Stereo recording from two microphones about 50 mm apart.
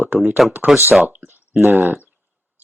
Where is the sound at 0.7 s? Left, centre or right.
Centre.